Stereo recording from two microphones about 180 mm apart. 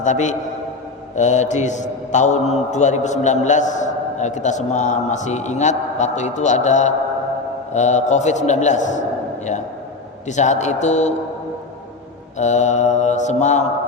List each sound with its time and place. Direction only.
0.0 s a man's voice: 40° left (ahead or behind)
10.2 s a man's voice: 40° left (ahead or behind)
12.4 s a man's voice: 40° left (ahead or behind)